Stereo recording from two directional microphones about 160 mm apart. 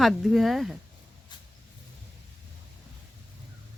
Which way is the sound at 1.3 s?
30° left (ahead or behind).